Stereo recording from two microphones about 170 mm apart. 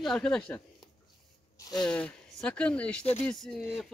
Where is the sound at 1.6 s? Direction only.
25° left (ahead or behind).